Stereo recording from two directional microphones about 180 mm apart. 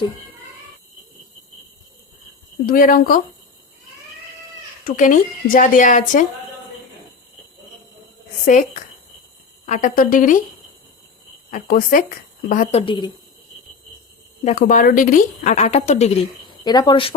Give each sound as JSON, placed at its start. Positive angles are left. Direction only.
{"t": 2.6, "sound": "speech", "side_deg": 50}
{"t": 4.9, "sound": "speech", "side_deg": 45}
{"t": 8.4, "sound": "speech", "side_deg": 45}
{"t": 11.5, "sound": "speech", "side_deg": 50}
{"t": 12.7, "sound": "a woman's voice", "side_deg": 30}
{"t": 14.4, "sound": "speech", "side_deg": 45}